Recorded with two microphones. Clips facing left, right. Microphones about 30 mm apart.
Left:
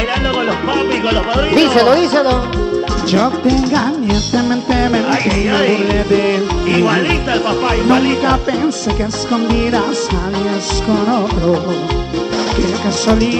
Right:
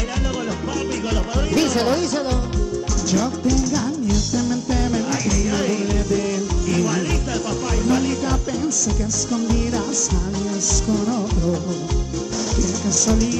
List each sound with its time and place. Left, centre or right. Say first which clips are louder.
1.5 s music: left 9 dB; left
10.9 s music: left 9 dB; left
12.8 s music: left 5 dB; left